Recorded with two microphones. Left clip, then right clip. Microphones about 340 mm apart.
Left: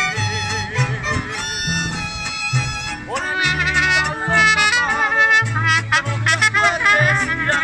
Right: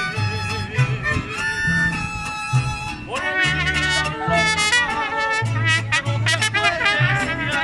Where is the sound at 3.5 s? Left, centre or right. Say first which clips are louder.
Left 4 dB; centre.